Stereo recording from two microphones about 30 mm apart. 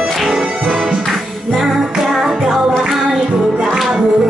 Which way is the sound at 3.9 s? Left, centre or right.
Right.